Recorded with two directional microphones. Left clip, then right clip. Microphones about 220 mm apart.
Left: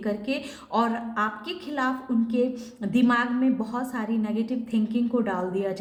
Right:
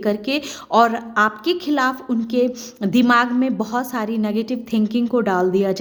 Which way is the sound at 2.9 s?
45° right (ahead or behind).